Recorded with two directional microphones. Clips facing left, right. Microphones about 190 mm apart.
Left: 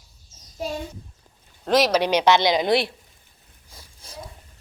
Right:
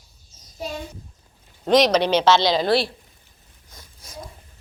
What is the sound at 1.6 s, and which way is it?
Speech, 5° left (ahead or behind).